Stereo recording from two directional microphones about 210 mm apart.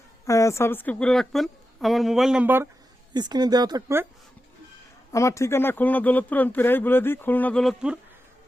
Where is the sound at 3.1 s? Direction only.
20° right (ahead or behind).